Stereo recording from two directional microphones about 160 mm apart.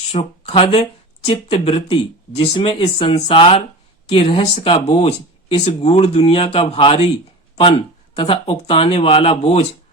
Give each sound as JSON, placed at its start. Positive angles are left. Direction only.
{"t": 0.1, "sound": "speech", "side_deg": 35}
{"t": 8.1, "sound": "speech", "side_deg": 35}